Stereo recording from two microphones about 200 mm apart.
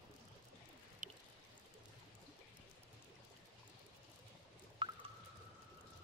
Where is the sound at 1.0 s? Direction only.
40° right (ahead or behind).